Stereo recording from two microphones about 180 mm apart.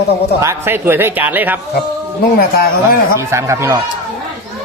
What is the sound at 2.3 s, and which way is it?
Speech, 55° left (ahead or behind).